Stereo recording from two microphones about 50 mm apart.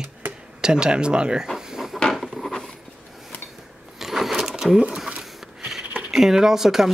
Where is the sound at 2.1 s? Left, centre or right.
Centre.